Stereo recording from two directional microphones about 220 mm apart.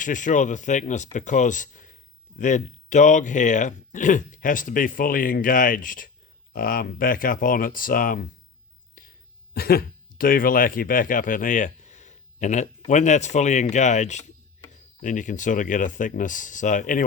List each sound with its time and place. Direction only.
0.0 s speech: 35° left (ahead or behind)
9.0 s whispering: 40° left (ahead or behind)
9.6 s speech: 45° left (ahead or behind)